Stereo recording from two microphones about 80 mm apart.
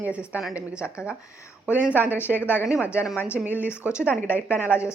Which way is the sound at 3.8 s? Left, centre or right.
Centre.